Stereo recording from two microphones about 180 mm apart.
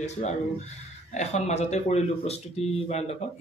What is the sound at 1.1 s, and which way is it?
Speech, 40° left (ahead or behind).